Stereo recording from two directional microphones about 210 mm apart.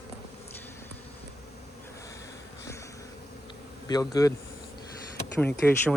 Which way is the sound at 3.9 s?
15° left (ahead or behind).